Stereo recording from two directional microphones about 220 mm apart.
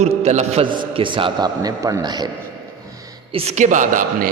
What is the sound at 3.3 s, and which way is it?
Speech, 35° right (ahead or behind).